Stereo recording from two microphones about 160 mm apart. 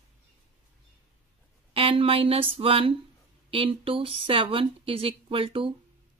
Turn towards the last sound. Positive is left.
turn(degrees=-35)  # may be behind; listen again after turning